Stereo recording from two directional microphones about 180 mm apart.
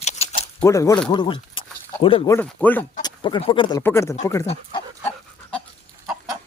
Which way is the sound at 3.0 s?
25° left (ahead or behind).